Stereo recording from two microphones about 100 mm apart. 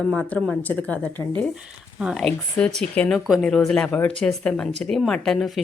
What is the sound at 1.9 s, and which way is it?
Speech, 5° right (ahead or behind).